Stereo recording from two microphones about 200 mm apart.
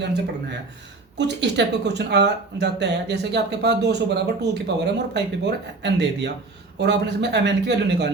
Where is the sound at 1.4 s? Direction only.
60° right (ahead or behind).